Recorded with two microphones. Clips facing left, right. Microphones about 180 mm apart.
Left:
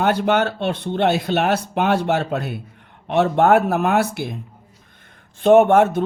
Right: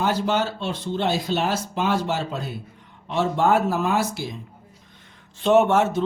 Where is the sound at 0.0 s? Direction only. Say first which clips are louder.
Left 4 dB; 60° left (ahead or behind).